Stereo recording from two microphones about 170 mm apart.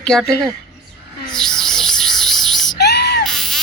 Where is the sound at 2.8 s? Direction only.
70° left (ahead or behind).